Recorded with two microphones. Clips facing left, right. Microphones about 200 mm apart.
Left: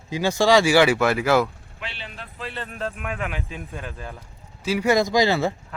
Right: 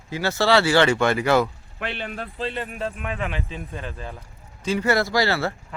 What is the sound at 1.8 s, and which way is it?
Speech, 55° right (ahead or behind).